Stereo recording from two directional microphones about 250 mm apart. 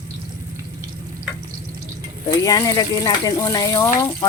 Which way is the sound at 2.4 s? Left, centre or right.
Centre.